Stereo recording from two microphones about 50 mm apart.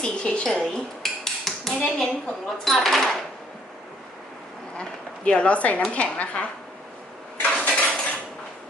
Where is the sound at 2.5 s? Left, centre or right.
Centre.